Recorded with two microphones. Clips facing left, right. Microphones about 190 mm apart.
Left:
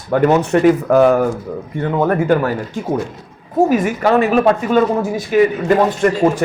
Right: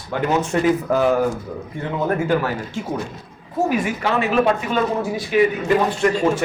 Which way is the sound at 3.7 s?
40° left (ahead or behind).